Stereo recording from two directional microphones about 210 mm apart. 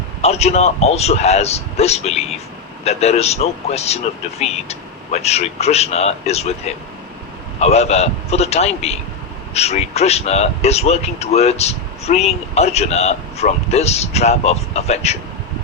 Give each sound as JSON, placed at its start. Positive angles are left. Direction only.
{"t": 0.2, "sound": "speech", "side_deg": 30}